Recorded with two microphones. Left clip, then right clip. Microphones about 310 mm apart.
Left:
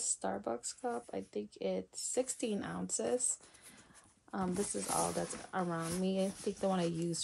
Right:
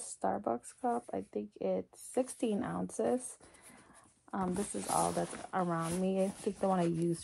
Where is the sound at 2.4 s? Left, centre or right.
Centre.